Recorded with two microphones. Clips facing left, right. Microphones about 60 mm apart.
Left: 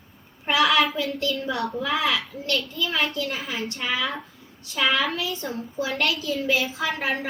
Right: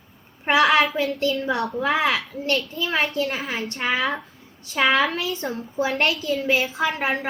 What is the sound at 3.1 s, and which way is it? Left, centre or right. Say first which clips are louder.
A woman's voice: right 3 dB; right.